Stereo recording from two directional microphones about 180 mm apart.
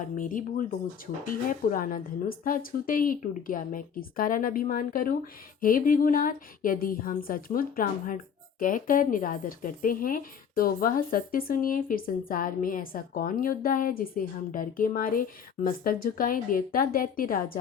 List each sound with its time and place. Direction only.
0.0 s a woman's voice: 45° left (ahead or behind)